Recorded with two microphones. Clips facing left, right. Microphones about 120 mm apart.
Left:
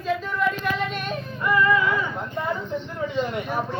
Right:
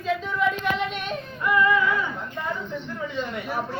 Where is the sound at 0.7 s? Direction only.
20° right (ahead or behind).